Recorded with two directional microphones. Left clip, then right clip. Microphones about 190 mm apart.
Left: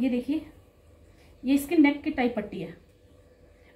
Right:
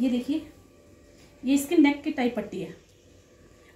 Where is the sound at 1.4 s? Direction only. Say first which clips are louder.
Right 1 dB; 10° left (ahead or behind).